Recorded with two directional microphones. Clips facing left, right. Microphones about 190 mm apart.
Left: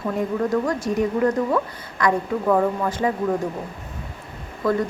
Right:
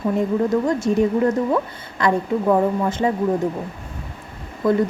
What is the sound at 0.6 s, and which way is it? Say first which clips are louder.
A woman's voice: right 4 dB; 25° right (ahead or behind).